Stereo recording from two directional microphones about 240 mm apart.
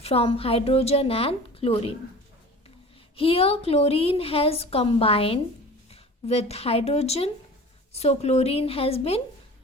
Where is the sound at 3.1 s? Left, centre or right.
Left.